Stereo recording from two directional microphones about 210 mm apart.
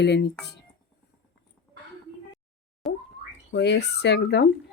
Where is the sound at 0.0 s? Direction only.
55° left (ahead or behind).